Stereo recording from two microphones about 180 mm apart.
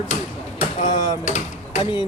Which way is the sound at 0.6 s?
45° left (ahead or behind).